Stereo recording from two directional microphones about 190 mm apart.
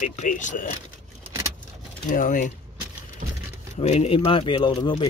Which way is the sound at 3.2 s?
40° right (ahead or behind).